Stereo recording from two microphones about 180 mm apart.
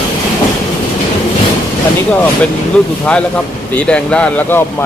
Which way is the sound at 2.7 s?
5° left (ahead or behind).